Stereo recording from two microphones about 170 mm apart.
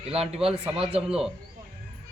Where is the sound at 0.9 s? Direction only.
5° right (ahead or behind).